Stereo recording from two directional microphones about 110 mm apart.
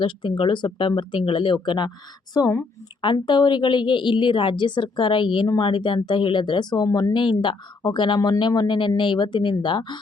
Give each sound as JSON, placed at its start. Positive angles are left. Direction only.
{"t": 0.0, "sound": "a woman's voice", "side_deg": 50}
{"t": 3.0, "sound": "a woman's voice", "side_deg": 45}
{"t": 7.1, "sound": "a woman's voice", "side_deg": 45}